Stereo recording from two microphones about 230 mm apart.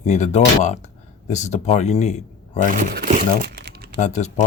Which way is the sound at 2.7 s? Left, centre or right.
Right.